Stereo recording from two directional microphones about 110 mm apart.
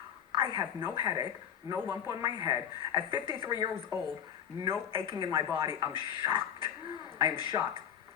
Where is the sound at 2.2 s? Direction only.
35° right (ahead or behind).